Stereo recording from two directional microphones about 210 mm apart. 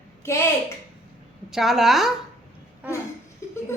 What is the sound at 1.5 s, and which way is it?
Speech, centre (ahead or behind).